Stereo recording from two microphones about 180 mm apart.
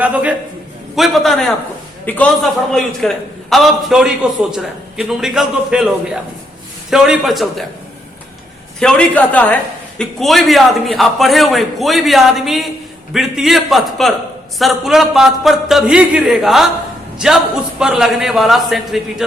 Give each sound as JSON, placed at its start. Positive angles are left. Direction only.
{"t": 0.0, "sound": "a man's voice", "side_deg": -10}
{"t": 8.8, "sound": "a woman's voice", "side_deg": 5}